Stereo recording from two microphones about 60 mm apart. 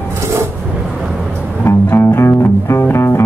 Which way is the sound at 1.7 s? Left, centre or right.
Left.